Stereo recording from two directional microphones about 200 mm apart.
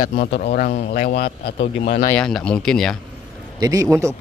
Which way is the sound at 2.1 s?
5° left (ahead or behind).